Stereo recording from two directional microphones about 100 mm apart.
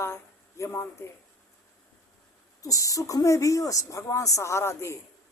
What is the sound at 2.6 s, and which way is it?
Speech, 35° left (ahead or behind).